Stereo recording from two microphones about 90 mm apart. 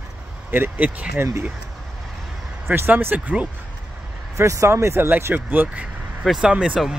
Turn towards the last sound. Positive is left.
turn(degrees=-10)  # may be behind; listen again after turning